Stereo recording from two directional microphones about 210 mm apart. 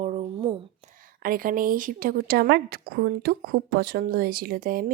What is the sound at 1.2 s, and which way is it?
Speech, 45° right (ahead or behind).